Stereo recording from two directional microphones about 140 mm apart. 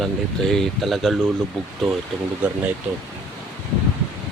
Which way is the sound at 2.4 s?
10° right (ahead or behind).